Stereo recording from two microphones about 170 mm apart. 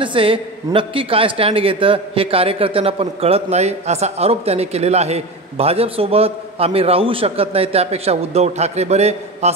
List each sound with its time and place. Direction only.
0.0 s a man's voice: 30° right (ahead or behind)